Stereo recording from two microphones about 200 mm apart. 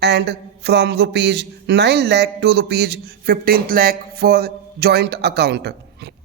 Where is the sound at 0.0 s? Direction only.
55° right (ahead or behind).